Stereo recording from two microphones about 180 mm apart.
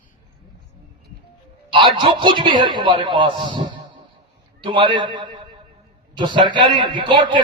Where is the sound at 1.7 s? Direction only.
30° right (ahead or behind).